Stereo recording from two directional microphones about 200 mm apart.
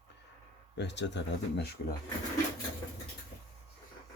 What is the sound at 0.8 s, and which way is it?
Speech, 60° left (ahead or behind).